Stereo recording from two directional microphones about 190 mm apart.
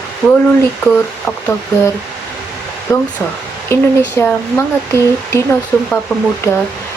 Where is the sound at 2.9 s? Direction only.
15° left (ahead or behind).